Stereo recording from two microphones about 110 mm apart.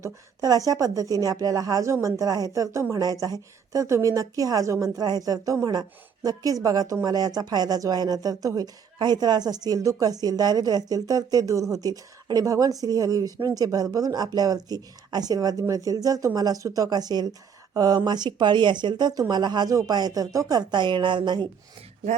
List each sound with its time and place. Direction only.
0.0 s a woman's voice: 35° right (ahead or behind)